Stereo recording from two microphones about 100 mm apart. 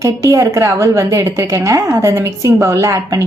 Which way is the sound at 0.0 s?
30° right (ahead or behind).